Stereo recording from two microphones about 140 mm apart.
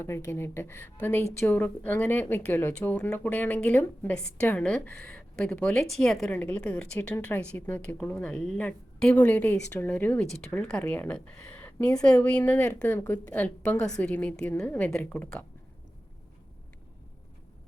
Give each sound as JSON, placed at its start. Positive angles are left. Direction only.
{"t": 0.0, "sound": "a woman's voice", "side_deg": 20}
{"t": 14.3, "sound": "a woman's voice", "side_deg": 20}
{"t": 14.6, "sound": "a woman's voice", "side_deg": 10}